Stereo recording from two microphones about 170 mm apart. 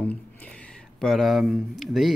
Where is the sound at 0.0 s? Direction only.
10° left (ahead or behind).